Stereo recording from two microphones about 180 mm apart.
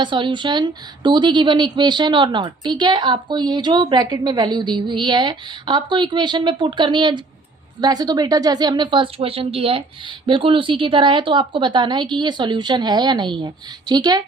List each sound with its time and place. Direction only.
0.0 s a woman's voice: 25° right (ahead or behind)